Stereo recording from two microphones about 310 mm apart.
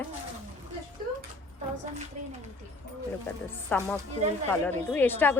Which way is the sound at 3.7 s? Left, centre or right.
Centre.